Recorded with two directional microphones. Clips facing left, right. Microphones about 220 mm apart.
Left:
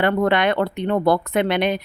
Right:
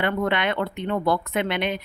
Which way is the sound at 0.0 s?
40° left (ahead or behind).